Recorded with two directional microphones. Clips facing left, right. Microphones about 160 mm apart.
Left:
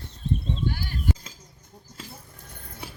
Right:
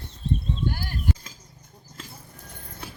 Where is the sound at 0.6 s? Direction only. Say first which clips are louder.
Right 1 dB; 45° right (ahead or behind).